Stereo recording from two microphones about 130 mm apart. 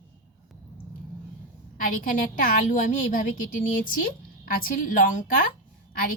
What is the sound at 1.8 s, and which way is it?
A woman's voice, 90° left.